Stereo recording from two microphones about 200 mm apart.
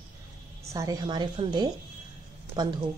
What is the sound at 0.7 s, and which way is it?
A woman's voice, 15° right (ahead or behind).